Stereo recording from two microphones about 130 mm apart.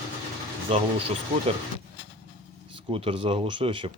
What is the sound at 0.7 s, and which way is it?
Speech, 45° right (ahead or behind).